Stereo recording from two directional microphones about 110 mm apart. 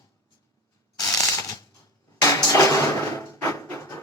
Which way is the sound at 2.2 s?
30° left (ahead or behind).